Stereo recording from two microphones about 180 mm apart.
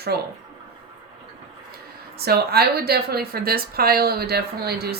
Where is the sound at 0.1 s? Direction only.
60° right (ahead or behind).